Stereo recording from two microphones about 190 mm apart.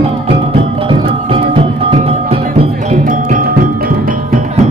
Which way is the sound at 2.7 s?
45° right (ahead or behind).